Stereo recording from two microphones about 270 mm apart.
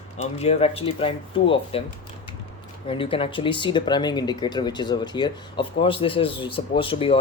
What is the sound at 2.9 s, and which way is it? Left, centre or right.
Speech, centre.